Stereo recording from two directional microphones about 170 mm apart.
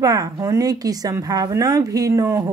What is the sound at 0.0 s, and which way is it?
Speech, 20° right (ahead or behind).